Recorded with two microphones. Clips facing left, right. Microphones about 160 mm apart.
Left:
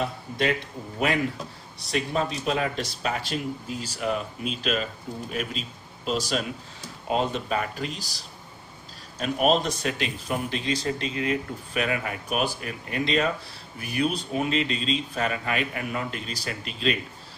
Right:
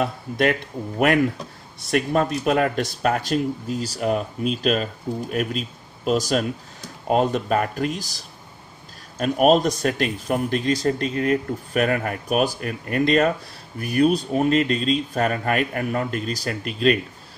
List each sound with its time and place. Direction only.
0.0 s a man's voice: 55° right (ahead or behind)
9.2 s speech: 45° right (ahead or behind)